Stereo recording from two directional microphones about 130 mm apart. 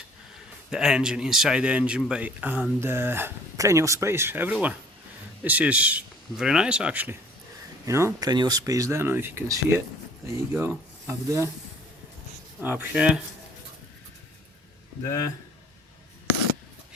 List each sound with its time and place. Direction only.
0.7 s speech: 5° right (ahead or behind); by 11.4 s 20° right (ahead or behind)
12.5 s speech: 15° right (ahead or behind)